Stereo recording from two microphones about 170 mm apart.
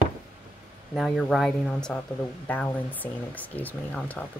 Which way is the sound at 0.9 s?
Centre (ahead or behind).